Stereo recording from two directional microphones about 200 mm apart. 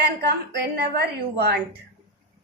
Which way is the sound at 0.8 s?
55° right (ahead or behind).